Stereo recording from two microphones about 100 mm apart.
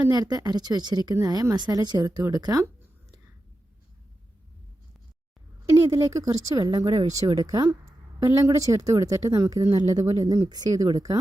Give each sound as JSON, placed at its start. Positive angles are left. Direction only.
{"t": 0.1, "sound": "speech", "side_deg": -40}
{"t": 5.9, "sound": "speech", "side_deg": -35}